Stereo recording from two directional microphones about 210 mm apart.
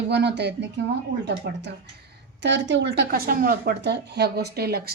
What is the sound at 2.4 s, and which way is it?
Speech, 60° right (ahead or behind).